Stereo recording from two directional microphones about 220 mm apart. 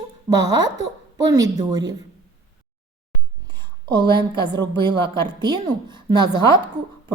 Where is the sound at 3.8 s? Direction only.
20° right (ahead or behind).